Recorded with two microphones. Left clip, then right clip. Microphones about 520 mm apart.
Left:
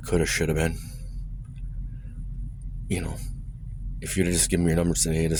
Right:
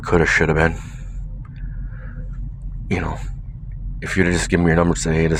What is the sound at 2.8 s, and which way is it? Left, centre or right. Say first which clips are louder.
Speech: right 8 dB; left.